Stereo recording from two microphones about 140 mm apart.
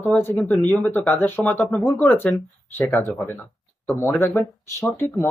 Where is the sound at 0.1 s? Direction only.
15° left (ahead or behind).